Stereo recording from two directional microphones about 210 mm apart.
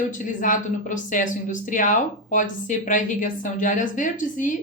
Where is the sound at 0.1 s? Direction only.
40° left (ahead or behind).